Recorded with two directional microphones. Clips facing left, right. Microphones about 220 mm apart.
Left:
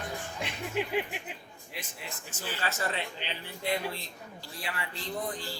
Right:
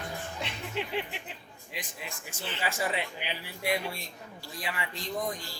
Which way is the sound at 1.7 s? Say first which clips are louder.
Right 1 dB; 15° right (ahead or behind).